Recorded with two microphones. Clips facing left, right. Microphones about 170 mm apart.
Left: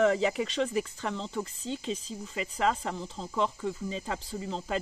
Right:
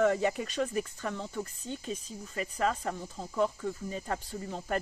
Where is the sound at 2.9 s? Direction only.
80° left.